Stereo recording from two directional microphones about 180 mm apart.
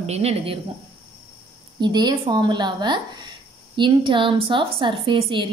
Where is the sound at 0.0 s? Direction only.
35° right (ahead or behind).